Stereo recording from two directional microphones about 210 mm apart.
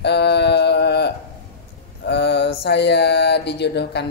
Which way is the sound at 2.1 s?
55° left (ahead or behind).